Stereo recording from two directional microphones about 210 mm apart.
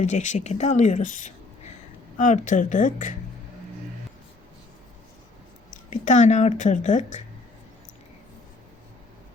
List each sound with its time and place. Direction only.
0.0 s speech: 35° left (ahead or behind)
5.7 s speech: 35° left (ahead or behind)